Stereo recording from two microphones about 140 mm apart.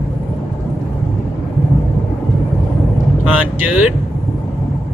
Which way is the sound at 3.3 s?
10° right (ahead or behind).